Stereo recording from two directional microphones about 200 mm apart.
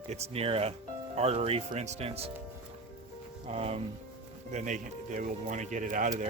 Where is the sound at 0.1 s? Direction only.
30° right (ahead or behind).